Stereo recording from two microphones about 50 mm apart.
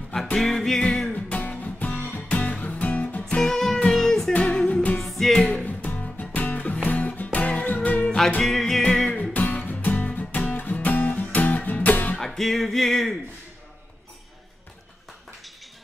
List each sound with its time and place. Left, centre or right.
0.1 s music: centre
1.1 s music: left
3.3 s music: centre
4.4 s music: left
4.9 s music: centre
5.4 s music: left
8.4 s music: centre
9.3 s music: left
12.2 s music: centre